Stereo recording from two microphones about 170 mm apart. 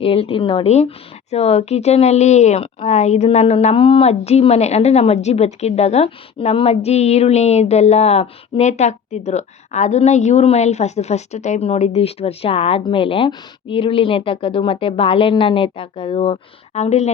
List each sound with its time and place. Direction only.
0.0 s a woman's voice: 35° left (ahead or behind)